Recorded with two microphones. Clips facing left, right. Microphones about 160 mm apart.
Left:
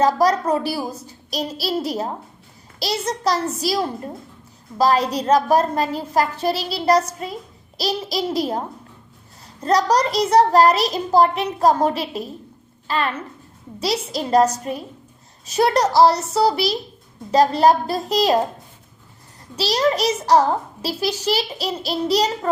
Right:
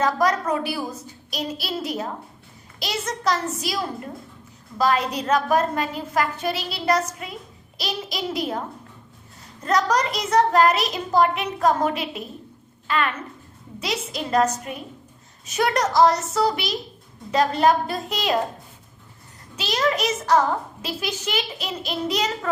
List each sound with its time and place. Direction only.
0.0 s a child's voice: 35° left (ahead or behind)
9.6 s a child's voice: 35° left (ahead or behind)
19.5 s a child's voice: 35° left (ahead or behind)